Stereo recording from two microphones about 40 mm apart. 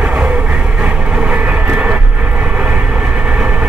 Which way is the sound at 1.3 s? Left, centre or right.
Right.